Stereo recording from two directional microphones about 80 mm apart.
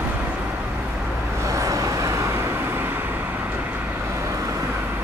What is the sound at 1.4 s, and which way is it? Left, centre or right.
Vehicle, right.